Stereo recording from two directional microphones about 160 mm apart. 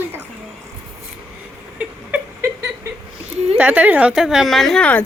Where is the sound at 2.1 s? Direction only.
15° right (ahead or behind).